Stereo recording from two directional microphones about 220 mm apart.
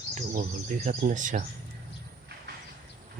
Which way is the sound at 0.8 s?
35° right (ahead or behind).